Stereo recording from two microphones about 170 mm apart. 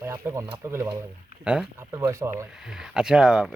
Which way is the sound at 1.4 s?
5° right (ahead or behind).